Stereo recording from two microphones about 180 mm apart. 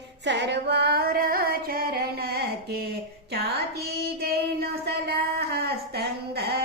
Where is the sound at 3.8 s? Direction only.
60° right (ahead or behind).